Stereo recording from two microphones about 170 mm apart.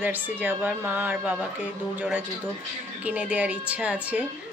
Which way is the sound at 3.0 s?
10° right (ahead or behind).